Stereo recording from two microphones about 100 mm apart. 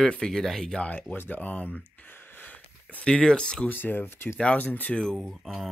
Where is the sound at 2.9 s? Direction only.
10° left (ahead or behind).